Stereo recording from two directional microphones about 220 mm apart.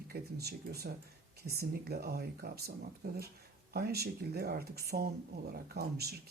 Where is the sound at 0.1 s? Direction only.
45° right (ahead or behind).